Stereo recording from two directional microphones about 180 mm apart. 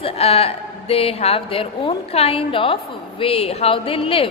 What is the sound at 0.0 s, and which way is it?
A woman's voice, 35° left (ahead or behind).